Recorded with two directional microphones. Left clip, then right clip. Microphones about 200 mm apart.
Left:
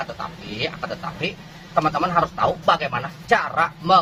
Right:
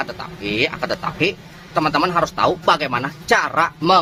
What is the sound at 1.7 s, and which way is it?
Speech, 45° right (ahead or behind).